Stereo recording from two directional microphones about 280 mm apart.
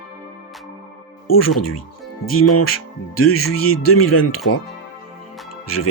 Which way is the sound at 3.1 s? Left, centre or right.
Left.